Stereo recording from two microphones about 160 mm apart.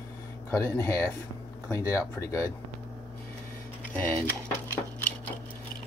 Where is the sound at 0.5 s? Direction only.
15° left (ahead or behind).